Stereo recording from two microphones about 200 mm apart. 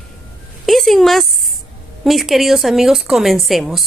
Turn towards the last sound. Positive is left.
turn(degrees=0)  # may be behind; listen again after turning